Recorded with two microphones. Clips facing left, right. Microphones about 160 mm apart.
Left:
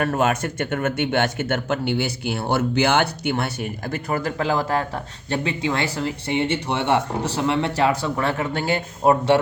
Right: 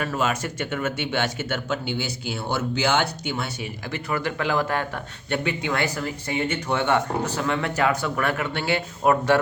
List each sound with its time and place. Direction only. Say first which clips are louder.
0.0 s speech: left 4 dB; 55° left (ahead or behind)
4.1 s speech: left 2 dB; 40° left (ahead or behind)
9.0 s speech: left 3 dB; 25° left (ahead or behind)